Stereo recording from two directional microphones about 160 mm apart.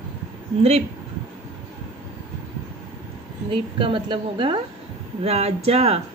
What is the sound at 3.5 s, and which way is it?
A woman's voice, 30° right (ahead or behind).